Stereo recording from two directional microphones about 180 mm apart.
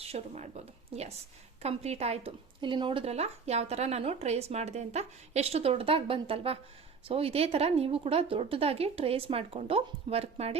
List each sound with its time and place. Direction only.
0.1 s speech: 35° right (ahead or behind)